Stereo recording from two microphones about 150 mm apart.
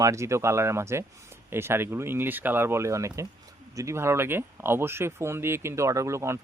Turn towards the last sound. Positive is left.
turn(degrees=-20)  # may be behind; listen again after turning